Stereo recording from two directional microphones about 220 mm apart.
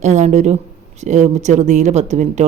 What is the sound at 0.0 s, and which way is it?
Speech, 30° right (ahead or behind).